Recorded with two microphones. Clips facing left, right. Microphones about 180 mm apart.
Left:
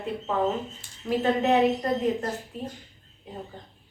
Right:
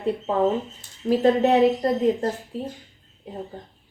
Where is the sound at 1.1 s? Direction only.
35° right (ahead or behind).